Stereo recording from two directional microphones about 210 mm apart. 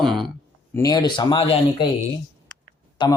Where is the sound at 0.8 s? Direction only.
15° left (ahead or behind).